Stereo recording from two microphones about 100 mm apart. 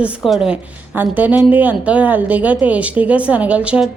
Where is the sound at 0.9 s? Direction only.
15° right (ahead or behind).